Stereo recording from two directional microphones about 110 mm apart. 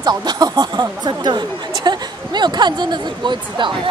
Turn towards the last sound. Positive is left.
turn(degrees=-45)  # may be behind; listen again after turning